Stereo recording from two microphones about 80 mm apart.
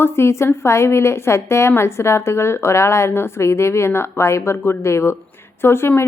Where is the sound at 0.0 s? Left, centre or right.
Left.